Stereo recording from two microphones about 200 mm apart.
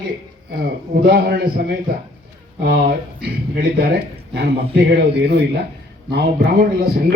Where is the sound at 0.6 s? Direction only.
50° right (ahead or behind).